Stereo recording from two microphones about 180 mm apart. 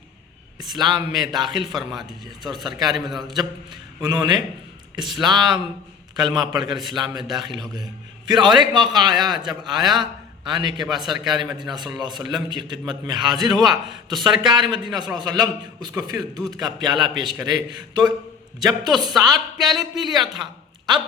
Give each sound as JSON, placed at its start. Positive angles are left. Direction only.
{"t": 0.6, "sound": "a man's voice", "side_deg": -25}
{"t": 2.9, "sound": "a man's voice", "side_deg": 0}
{"t": 4.0, "sound": "a man's voice", "side_deg": -25}
{"t": 20.3, "sound": "a sound", "side_deg": -25}